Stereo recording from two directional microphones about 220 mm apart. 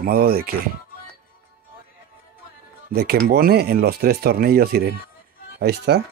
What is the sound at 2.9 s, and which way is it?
Speech, 45° right (ahead or behind).